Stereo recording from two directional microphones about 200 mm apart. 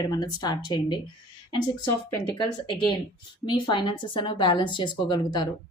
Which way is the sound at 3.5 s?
20° left (ahead or behind).